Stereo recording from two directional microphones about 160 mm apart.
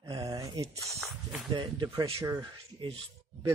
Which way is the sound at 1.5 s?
30° right (ahead or behind).